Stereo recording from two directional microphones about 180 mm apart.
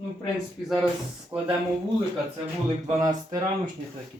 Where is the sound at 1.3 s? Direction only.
15° right (ahead or behind).